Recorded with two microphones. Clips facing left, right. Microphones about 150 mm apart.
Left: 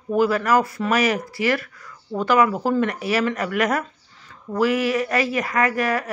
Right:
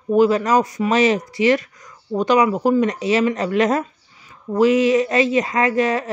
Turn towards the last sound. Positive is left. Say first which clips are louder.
# right 3 dB
turn(degrees=-20)  # may be behind; listen again after turning